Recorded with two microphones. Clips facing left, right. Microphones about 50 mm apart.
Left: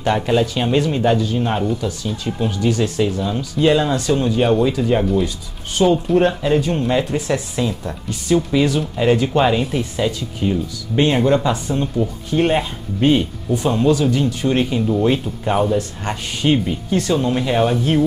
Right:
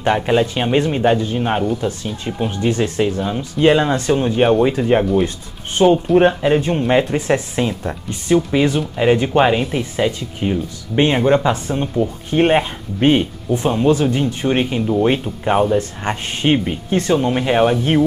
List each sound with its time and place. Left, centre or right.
0.0 s speech: right